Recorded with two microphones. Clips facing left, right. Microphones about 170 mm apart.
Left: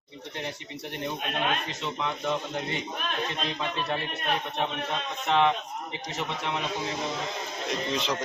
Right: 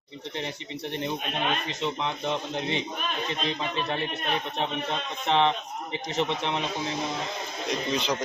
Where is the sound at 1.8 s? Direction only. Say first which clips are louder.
Right 2 dB; 25° right (ahead or behind).